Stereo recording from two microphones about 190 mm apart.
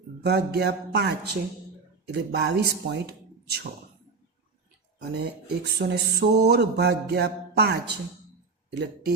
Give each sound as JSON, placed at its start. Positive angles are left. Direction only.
{"t": 0.2, "sound": "speech", "side_deg": -60}
{"t": 5.1, "sound": "speech", "side_deg": -55}